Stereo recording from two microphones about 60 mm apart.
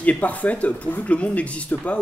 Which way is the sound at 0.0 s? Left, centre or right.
Left.